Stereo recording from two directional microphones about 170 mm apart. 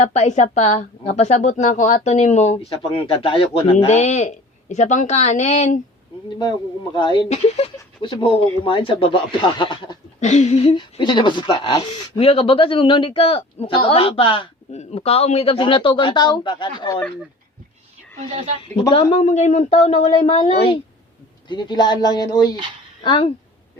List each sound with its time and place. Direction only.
0.1 s a woman's voice: 45° left (ahead or behind)
6.4 s a woman's voice: 25° left (ahead or behind)
10.2 s a woman's voice: 40° left (ahead or behind); by 11.8 s 25° left (ahead or behind)
11.9 s a woman's voice: 35° left (ahead or behind)
18.6 s a woman's voice: 35° left (ahead or behind)
21.5 s a woman's voice: 25° left (ahead or behind)